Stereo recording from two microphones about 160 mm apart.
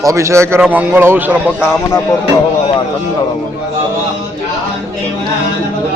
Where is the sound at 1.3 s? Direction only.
15° left (ahead or behind).